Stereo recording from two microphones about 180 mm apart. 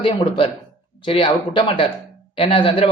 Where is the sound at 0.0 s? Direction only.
30° left (ahead or behind).